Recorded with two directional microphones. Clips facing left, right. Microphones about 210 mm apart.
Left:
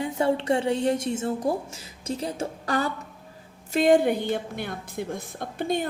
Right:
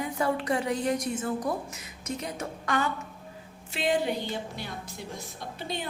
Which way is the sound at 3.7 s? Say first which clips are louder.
Left 8 dB; 45° left (ahead or behind).